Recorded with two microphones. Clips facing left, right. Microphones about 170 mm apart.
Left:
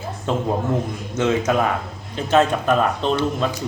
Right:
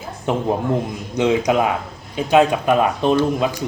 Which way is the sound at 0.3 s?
15° right (ahead or behind).